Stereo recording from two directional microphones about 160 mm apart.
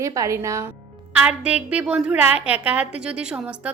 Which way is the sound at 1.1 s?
5° right (ahead or behind).